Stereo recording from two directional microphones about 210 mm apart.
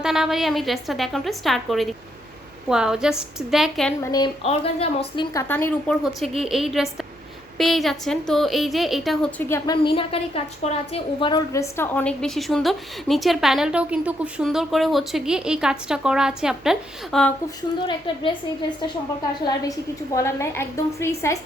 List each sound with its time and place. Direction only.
0.0 s a woman's voice: 5° right (ahead or behind)
4.0 s a woman's voice: 20° left (ahead or behind)
4.4 s a woman's voice: 30° left (ahead or behind); by 9.7 s 10° left (ahead or behind)
9.8 s a woman's voice: 25° left (ahead or behind); by 17.3 s centre (ahead or behind)
17.8 s a woman's voice: 25° left (ahead or behind)
19.5 s a woman's voice: 15° left (ahead or behind)